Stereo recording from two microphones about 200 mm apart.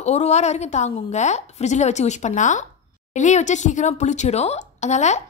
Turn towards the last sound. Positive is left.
turn(degrees=35)  # may be behind; listen again after turning